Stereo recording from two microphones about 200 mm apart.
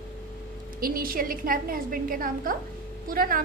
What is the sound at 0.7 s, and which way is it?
A woman's voice, 45° right (ahead or behind).